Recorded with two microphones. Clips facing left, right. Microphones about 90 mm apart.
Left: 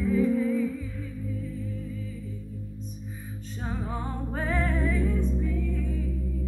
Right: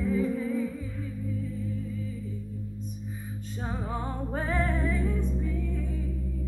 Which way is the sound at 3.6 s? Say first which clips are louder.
Even; 15° right (ahead or behind).